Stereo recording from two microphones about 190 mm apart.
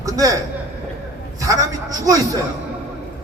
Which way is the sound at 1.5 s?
15° right (ahead or behind).